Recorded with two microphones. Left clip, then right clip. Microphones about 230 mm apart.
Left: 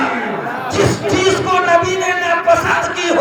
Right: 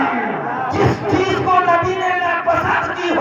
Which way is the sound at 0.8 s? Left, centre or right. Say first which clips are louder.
Left 3 dB; left.